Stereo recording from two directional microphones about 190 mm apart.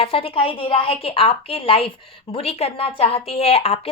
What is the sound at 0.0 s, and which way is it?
A woman's voice, 30° left (ahead or behind).